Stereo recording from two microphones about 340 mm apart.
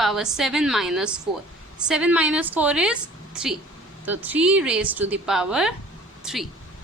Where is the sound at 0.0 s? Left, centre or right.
Centre.